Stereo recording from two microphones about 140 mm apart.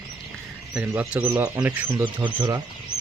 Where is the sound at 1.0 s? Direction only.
10° right (ahead or behind).